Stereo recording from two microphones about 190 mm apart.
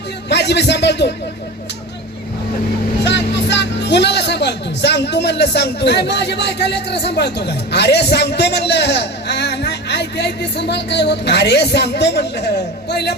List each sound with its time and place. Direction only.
0.3 s speech: 65° left (ahead or behind)
3.0 s speech: 65° left (ahead or behind)